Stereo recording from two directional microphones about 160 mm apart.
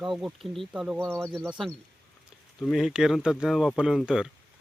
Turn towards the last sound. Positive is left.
turn(degrees=-5)  # may be behind; listen again after turning